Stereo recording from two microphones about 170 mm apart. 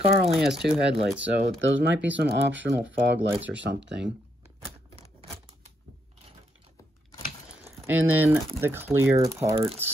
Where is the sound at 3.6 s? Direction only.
90° right.